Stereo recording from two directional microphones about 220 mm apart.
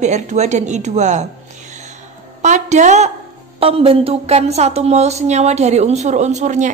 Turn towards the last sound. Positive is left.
turn(degrees=-35)  # may be behind; listen again after turning